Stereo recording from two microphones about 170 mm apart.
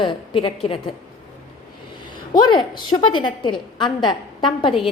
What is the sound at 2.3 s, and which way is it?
A woman's voice, 25° left (ahead or behind).